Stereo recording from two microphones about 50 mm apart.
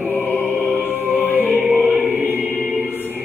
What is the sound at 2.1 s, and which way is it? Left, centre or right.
Music, right.